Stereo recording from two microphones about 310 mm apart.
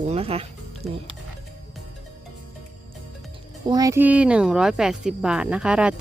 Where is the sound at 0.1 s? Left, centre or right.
Centre.